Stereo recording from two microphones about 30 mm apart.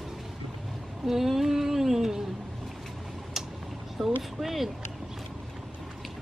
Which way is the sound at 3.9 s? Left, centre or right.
Centre.